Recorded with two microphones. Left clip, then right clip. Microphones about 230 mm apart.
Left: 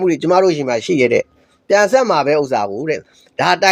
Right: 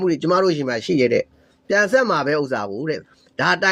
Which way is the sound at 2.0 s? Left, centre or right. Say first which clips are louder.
Left 5 dB; left.